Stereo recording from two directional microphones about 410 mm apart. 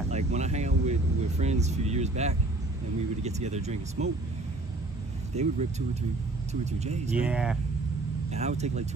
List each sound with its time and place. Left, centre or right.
0.3 s a sound: centre
1.4 s speech: centre
5.3 s speech: centre
7.2 s speech: centre
8.3 s speech: centre